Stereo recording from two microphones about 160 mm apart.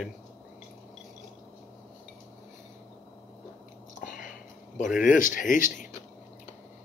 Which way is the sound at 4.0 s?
60° left (ahead or behind).